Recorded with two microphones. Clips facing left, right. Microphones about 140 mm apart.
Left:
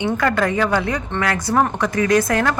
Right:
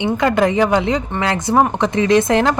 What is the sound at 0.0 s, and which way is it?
Speech, 20° right (ahead or behind).